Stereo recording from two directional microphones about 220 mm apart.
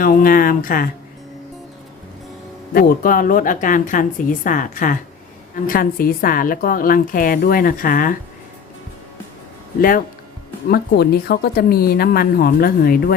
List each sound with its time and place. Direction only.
0.0 s a woman's voice: 40° left (ahead or behind)
2.7 s a woman's voice: 40° left (ahead or behind)
10.7 s a woman's voice: 45° left (ahead or behind)